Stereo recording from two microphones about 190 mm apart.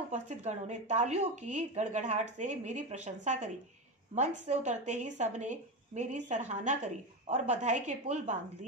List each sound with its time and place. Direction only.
0.1 s speech: 35° right (ahead or behind)